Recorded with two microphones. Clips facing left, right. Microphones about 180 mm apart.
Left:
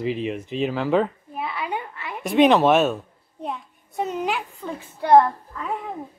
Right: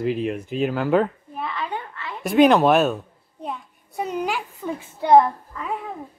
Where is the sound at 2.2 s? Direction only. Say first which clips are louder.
Right 1 dB; centre (ahead or behind).